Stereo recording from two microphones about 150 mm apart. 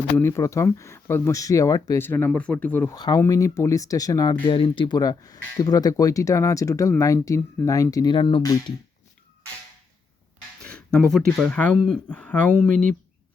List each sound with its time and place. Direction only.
0.2 s speech: 15° left (ahead or behind)
2.9 s speech: 25° left (ahead or behind)
4.4 s speech: 35° left (ahead or behind)
10.6 s speech: 5° left (ahead or behind)